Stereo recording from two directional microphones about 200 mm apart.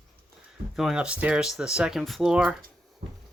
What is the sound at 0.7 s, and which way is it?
Speech, centre (ahead or behind).